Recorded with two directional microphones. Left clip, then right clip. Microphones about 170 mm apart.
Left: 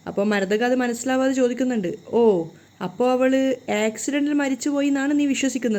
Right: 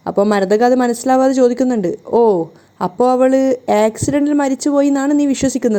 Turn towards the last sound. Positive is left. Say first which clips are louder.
# right 7 dB
turn(degrees=-25)  # may be behind; listen again after turning